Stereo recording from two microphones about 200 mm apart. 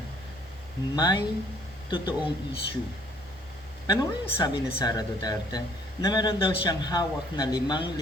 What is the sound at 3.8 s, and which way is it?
A man's voice, 20° left (ahead or behind).